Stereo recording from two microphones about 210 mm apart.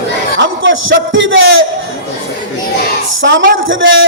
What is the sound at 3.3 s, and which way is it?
Speech, 60° right (ahead or behind).